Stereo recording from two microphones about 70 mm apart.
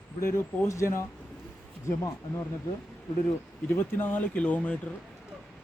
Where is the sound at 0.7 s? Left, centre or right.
Left.